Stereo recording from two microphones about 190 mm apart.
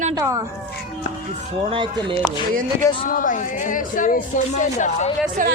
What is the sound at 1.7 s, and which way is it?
Speech, 25° right (ahead or behind).